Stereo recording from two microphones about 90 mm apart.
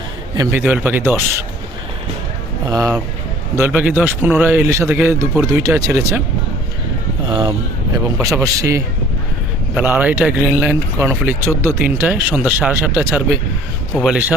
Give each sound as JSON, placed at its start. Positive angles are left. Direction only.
{"t": 0.5, "sound": "speech", "side_deg": -20}
{"t": 2.6, "sound": "speech", "side_deg": -40}
{"t": 3.7, "sound": "speech", "side_deg": -15}
{"t": 4.7, "sound": "speech", "side_deg": -30}
{"t": 7.3, "sound": "speech", "side_deg": -65}
{"t": 8.2, "sound": "speech", "side_deg": -35}
{"t": 9.7, "sound": "speech", "side_deg": -20}
{"t": 13.9, "sound": "speech", "side_deg": -5}